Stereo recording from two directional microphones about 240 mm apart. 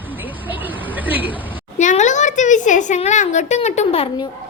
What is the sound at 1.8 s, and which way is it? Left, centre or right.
A woman's voice, left.